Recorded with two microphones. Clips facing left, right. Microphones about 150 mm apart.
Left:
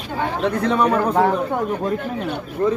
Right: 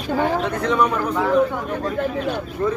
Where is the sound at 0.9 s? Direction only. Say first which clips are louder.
Left 4 dB; 55° left (ahead or behind).